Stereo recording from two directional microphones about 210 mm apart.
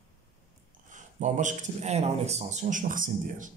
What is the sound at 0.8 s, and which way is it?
A man's voice, 35° right (ahead or behind).